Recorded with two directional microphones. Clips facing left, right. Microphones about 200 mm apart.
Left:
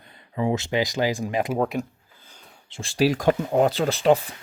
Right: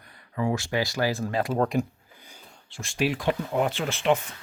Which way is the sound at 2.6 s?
25° left (ahead or behind).